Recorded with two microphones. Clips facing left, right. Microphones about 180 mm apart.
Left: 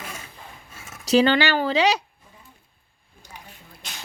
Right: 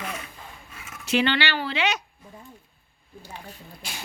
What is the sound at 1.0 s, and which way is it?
Speech, 40° left (ahead or behind).